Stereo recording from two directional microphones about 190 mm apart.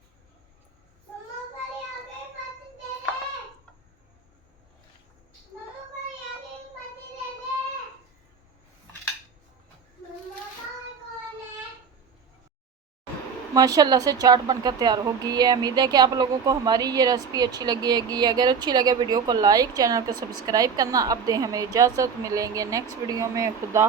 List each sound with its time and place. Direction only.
13.5 s speech: 20° right (ahead or behind)